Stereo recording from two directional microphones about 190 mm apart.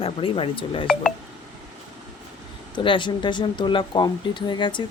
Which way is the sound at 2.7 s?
25° left (ahead or behind).